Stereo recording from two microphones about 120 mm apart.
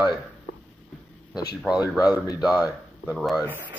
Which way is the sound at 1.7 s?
35° left (ahead or behind).